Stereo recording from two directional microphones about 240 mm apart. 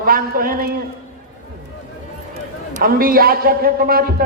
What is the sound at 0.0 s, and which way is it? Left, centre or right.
Speech, right.